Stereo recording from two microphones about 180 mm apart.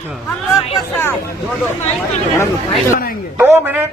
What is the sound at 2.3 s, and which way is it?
Chatter, 15° left (ahead or behind).